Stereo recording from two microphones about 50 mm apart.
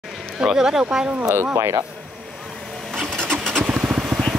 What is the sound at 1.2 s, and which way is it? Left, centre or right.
Speech, right.